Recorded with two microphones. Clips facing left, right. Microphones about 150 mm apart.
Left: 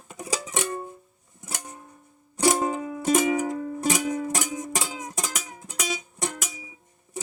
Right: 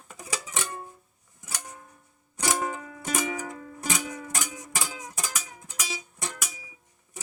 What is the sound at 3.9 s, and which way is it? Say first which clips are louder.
Music: left 7 dB; 25° left (ahead or behind).